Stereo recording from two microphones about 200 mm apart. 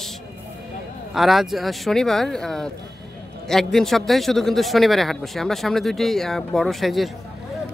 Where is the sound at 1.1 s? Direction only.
Centre (ahead or behind).